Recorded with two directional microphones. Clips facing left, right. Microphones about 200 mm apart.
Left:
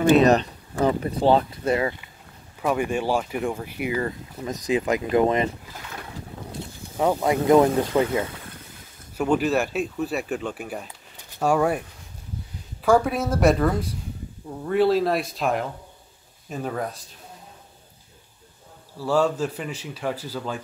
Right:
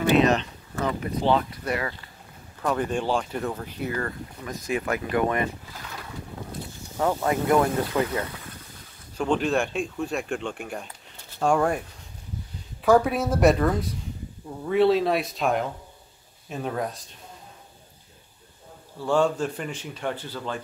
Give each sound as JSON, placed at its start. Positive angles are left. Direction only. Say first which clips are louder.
{"t": 0.1, "sound": "speech", "louder": "left 3 dB", "side_deg": 40}
{"t": 2.6, "sound": "speech", "louder": "left 2 dB", "side_deg": 10}
{"t": 7.0, "sound": "speech", "louder": "left 3 dB", "side_deg": 15}
{"t": 9.1, "sound": "speech", "louder": "left 2 dB", "side_deg": 10}
{"t": 12.8, "sound": "a man's voice", "louder": "even", "side_deg": 0}
{"t": 18.9, "sound": "a man's voice", "louder": "left 1 dB", "side_deg": 5}